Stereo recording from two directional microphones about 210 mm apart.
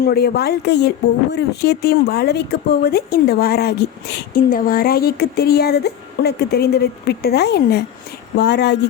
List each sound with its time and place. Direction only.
0.0 s speech: 50° left (ahead or behind)